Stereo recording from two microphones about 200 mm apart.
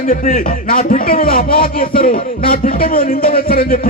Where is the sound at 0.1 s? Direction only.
40° left (ahead or behind).